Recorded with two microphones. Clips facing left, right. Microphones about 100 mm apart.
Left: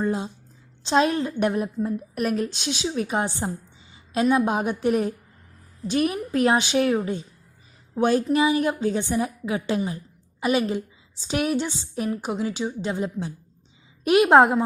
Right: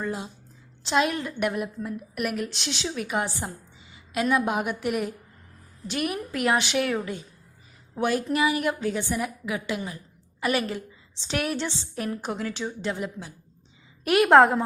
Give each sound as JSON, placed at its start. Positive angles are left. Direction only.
{"t": 0.0, "sound": "a woman's voice", "side_deg": 25}
{"t": 2.5, "sound": "a woman's voice", "side_deg": 15}
{"t": 2.9, "sound": "a woman's voice", "side_deg": 30}
{"t": 10.4, "sound": "a woman's voice", "side_deg": 20}